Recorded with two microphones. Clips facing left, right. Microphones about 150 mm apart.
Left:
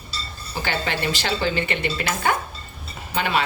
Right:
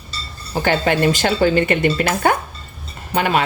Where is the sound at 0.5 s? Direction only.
50° right (ahead or behind).